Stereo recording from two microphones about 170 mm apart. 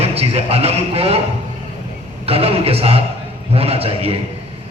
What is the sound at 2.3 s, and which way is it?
Speech, 35° right (ahead or behind).